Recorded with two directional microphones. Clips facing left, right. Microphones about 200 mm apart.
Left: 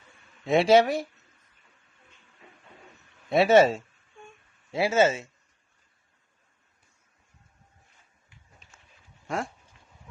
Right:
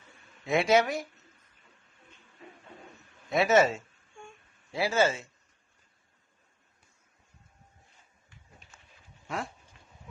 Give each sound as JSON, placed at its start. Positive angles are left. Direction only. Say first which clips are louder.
{"t": 0.4, "sound": "speech", "louder": "left 5 dB", "side_deg": 30}
{"t": 3.2, "sound": "speech", "louder": "left 5 dB", "side_deg": 30}
{"t": 9.2, "sound": "dog", "louder": "left 4 dB", "side_deg": 45}